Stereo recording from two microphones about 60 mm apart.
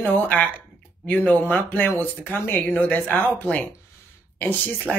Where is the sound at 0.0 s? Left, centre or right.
Left.